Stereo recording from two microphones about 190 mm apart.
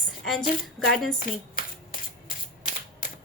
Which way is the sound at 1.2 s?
50° left (ahead or behind).